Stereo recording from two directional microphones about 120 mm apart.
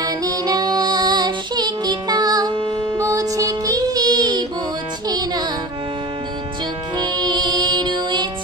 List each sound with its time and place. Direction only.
0.0 s music: 35° right (ahead or behind)
3.0 s music: 30° right (ahead or behind)
7.0 s music: 35° right (ahead or behind)